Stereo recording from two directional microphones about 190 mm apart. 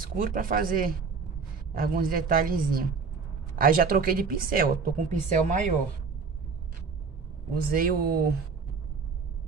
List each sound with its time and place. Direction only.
0.0 s speech: 45° right (ahead or behind)
7.7 s speech: 50° right (ahead or behind)